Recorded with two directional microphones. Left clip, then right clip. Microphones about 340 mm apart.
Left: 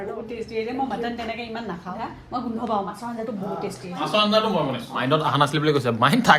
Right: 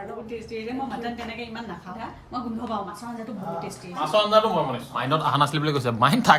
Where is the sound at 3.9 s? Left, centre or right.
Right.